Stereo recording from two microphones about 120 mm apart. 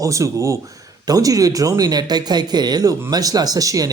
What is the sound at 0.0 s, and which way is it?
A man's voice, 25° right (ahead or behind).